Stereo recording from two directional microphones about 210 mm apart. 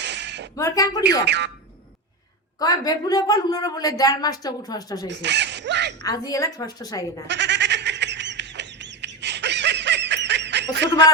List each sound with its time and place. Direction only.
0.0 s a sound: 55° right (ahead or behind)
0.5 s a woman's voice: 15° left (ahead or behind)
1.2 s speech: 55° right (ahead or behind)
2.6 s a woman's voice: 20° left (ahead or behind)
5.0 s speech: 55° right (ahead or behind)
6.0 s a woman's voice: 20° left (ahead or behind)
7.3 s goat: 55° right (ahead or behind)